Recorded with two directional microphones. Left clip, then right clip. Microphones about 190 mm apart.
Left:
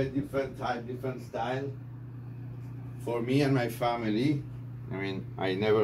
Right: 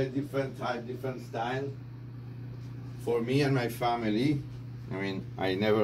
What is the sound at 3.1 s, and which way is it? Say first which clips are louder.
Speech: even; 35° left (ahead or behind).